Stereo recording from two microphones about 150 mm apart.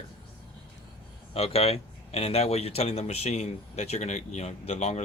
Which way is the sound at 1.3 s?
40° left (ahead or behind).